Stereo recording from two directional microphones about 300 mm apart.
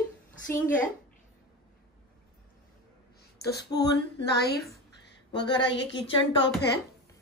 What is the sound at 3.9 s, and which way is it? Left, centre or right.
Speech, left.